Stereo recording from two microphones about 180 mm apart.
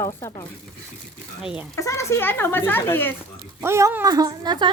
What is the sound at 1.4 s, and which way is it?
Speech, 5° right (ahead or behind).